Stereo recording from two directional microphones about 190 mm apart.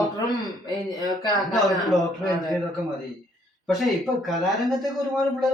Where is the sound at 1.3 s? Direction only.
Centre (ahead or behind).